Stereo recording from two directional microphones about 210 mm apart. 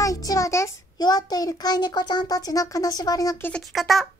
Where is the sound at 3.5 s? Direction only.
Centre (ahead or behind).